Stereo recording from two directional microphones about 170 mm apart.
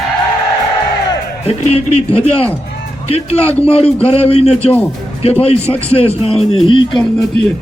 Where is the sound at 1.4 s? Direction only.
35° left (ahead or behind).